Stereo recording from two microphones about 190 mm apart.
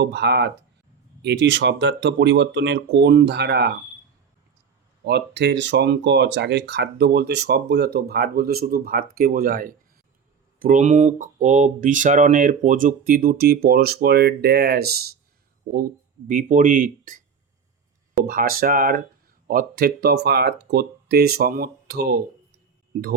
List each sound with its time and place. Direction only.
0.0 s speech: 60° right (ahead or behind)
5.0 s speech: 65° right (ahead or behind); by 17.2 s 45° right (ahead or behind)
18.2 s speech: 50° right (ahead or behind)